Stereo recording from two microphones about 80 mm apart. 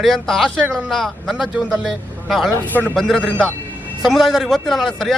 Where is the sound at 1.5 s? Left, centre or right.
Centre.